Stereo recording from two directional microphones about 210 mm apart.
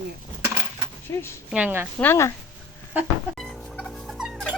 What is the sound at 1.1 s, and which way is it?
Speech, 15° left (ahead or behind).